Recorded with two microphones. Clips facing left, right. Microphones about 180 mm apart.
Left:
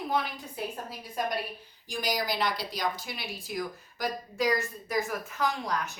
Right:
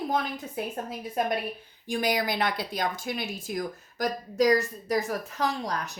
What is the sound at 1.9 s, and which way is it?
Speech, 55° right (ahead or behind).